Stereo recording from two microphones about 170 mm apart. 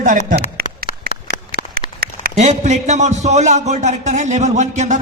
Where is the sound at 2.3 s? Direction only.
40° right (ahead or behind).